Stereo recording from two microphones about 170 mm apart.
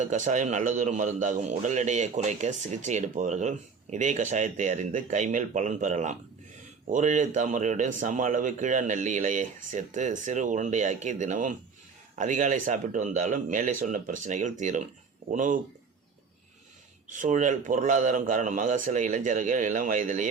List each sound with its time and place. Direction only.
0.0 s a man's voice: 45° right (ahead or behind)
17.1 s a man's voice: 45° right (ahead or behind)